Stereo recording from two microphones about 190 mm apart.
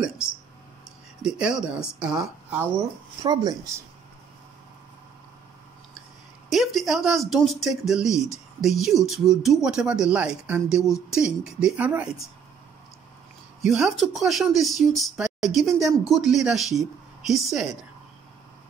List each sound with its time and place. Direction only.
1.2 s speech: 5° right (ahead or behind)
3.2 s speech: 20° right (ahead or behind)
6.5 s speech: centre (ahead or behind)
8.1 s speech: 15° left (ahead or behind)
8.6 s speech: centre (ahead or behind)
13.6 s a woman's voice: centre (ahead or behind)